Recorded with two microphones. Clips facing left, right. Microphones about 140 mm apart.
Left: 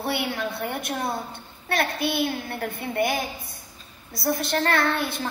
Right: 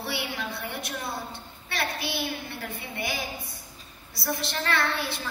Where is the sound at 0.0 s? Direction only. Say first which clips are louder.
Left 6 dB; 50° left (ahead or behind).